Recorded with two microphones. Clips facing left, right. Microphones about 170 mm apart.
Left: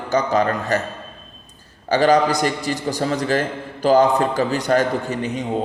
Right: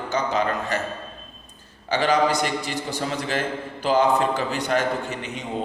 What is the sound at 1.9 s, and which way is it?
Speech, 40° left (ahead or behind).